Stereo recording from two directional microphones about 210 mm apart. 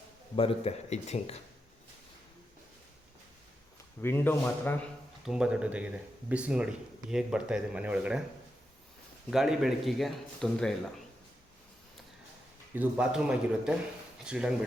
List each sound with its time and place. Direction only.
0.3 s speech: 30° left (ahead or behind)
4.0 s a man's voice: 10° left (ahead or behind)
5.2 s speech: 5° right (ahead or behind)
9.3 s speech: centre (ahead or behind)
12.7 s speech: 5° right (ahead or behind)